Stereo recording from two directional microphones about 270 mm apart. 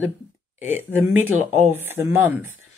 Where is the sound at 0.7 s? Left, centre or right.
Right.